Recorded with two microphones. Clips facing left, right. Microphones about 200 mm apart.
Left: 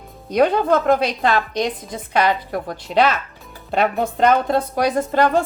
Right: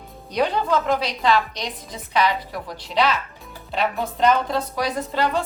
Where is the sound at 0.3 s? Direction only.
50° left (ahead or behind).